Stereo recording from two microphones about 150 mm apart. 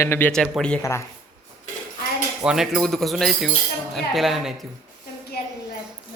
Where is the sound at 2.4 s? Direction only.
5° right (ahead or behind).